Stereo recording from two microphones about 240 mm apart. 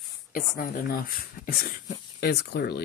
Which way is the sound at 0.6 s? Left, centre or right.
Left.